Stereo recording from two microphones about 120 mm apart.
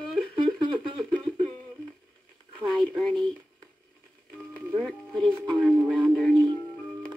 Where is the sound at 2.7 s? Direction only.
5° left (ahead or behind).